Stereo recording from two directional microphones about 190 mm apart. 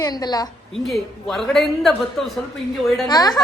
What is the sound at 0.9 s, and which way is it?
A man's voice, centre (ahead or behind).